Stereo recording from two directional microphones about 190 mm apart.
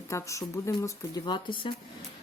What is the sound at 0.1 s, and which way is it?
Speech, 15° left (ahead or behind).